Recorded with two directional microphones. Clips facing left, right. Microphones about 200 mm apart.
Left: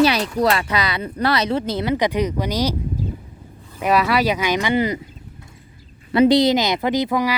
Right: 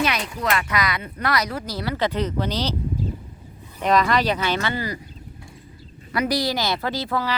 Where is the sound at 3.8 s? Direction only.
10° left (ahead or behind).